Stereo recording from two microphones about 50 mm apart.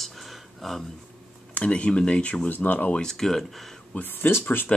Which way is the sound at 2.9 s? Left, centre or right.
Centre.